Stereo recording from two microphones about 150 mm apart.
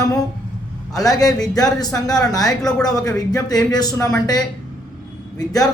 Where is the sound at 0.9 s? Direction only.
25° left (ahead or behind).